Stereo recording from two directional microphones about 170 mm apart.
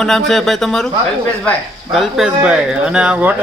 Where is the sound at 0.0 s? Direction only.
Centre (ahead or behind).